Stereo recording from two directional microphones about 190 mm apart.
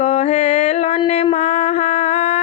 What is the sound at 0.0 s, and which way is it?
Mantra, 35° left (ahead or behind).